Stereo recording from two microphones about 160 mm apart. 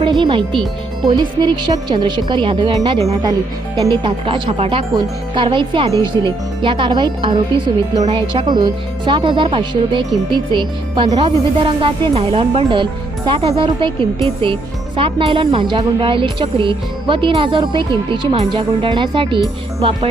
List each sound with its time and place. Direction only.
0.0 s speech: 30° right (ahead or behind)